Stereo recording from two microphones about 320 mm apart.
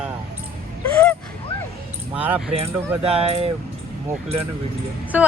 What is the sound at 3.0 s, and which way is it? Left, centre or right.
Speech, centre.